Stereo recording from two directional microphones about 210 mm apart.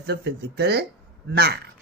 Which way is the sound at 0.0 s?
50° right (ahead or behind).